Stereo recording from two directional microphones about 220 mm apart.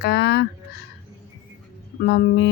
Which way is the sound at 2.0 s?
45° left (ahead or behind).